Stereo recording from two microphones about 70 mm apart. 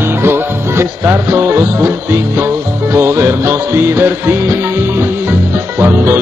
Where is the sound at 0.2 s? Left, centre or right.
Right.